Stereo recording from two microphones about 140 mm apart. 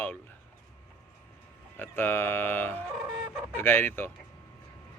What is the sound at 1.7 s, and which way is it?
Speech, 15° left (ahead or behind).